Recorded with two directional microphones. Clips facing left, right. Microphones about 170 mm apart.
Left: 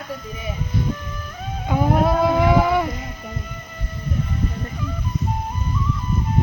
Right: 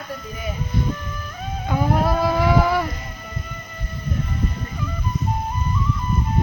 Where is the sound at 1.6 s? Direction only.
15° left (ahead or behind).